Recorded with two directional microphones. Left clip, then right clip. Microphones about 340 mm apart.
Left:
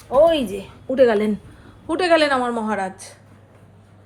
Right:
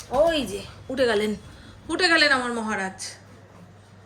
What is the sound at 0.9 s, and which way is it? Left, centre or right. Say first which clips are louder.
A woman's voice: left 6 dB; centre.